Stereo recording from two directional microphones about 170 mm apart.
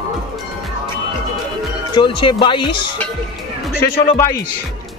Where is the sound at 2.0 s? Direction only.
30° left (ahead or behind).